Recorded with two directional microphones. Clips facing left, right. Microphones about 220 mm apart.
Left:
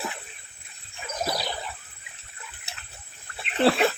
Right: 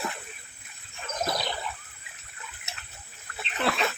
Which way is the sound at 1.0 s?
5° left (ahead or behind).